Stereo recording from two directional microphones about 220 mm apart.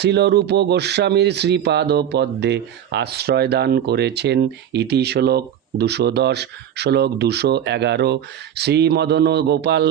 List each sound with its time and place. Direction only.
0.0 s speech: 50° right (ahead or behind)